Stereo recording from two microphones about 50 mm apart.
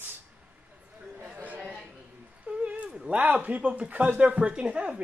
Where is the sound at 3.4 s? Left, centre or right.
Right.